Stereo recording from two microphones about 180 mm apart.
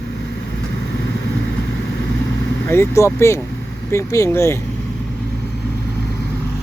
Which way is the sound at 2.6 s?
15° left (ahead or behind).